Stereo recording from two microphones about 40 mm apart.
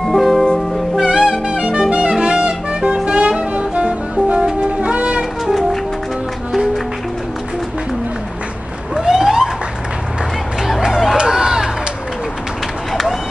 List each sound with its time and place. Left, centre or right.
0.0 s music: centre
1.0 s music: centre
1.5 s music: right
5.5 s music: centre
8.9 s police car: centre
10.8 s a sound: centre
11.1 s run: centre